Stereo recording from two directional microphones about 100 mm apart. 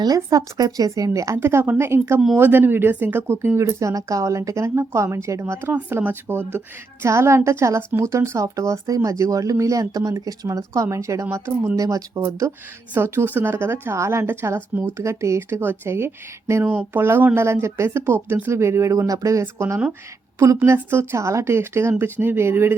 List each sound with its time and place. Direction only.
0.0 s a woman's voice: 40° right (ahead or behind)